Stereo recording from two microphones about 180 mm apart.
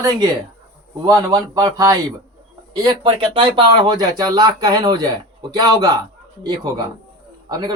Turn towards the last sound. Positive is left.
turn(degrees=-25)  # may be behind; listen again after turning